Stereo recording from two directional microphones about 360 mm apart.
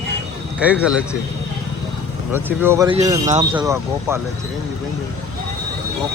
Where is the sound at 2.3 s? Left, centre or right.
Centre.